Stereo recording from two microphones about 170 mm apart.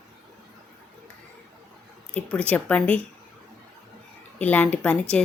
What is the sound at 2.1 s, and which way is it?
Speech, 10° left (ahead or behind).